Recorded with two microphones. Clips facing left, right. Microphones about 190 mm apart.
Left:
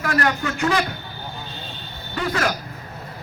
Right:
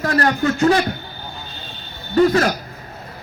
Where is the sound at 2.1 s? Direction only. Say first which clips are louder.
Right 9 dB; 35° right (ahead or behind).